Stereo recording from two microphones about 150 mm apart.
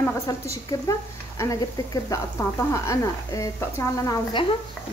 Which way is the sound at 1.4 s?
25° left (ahead or behind).